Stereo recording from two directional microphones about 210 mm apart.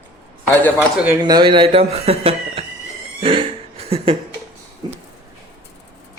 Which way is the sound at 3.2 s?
25° right (ahead or behind).